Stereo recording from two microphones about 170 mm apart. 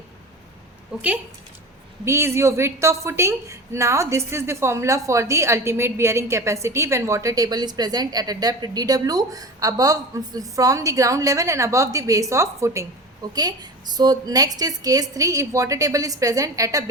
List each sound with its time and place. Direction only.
2.0 s a woman's voice: 15° right (ahead or behind)